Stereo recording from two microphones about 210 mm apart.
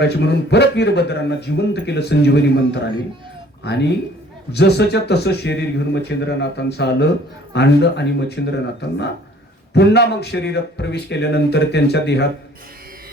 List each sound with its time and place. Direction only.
0.0 s speech: 55° left (ahead or behind)